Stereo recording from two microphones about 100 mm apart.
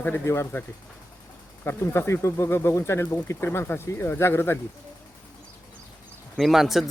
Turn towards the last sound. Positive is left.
turn(degrees=0)  # may be behind; listen again after turning